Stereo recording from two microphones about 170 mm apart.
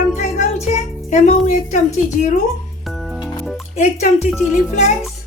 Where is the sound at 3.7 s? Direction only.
40° left (ahead or behind).